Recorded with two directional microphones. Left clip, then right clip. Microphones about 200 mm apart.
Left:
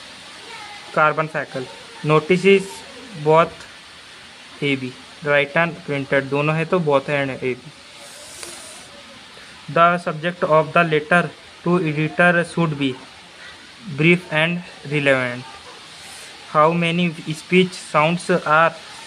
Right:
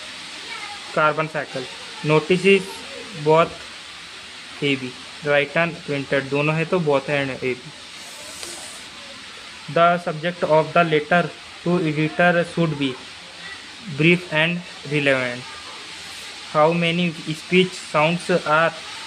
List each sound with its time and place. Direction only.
0.9 s speech: 10° left (ahead or behind)
4.6 s speech: 15° left (ahead or behind)
9.8 s speech: 15° left (ahead or behind)
13.9 s speech: 15° left (ahead or behind)
16.5 s speech: 15° left (ahead or behind)